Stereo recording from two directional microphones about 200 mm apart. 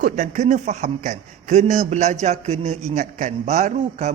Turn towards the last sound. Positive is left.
turn(degrees=-35)  # may be behind; listen again after turning